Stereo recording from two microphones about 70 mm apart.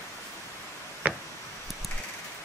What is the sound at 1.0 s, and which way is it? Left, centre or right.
Tick-tock, right.